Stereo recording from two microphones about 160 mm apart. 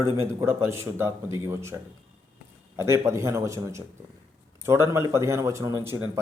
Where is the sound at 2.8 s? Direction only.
15° right (ahead or behind).